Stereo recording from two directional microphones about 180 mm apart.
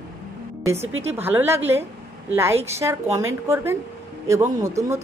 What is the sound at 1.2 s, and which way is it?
A woman's voice, 10° right (ahead or behind).